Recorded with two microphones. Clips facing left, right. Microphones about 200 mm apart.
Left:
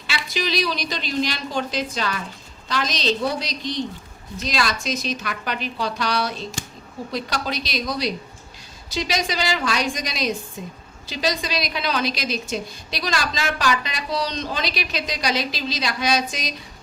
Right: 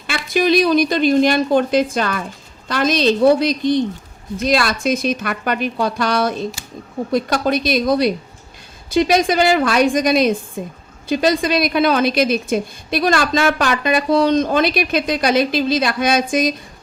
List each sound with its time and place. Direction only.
0.1 s a woman's voice: 55° right (ahead or behind)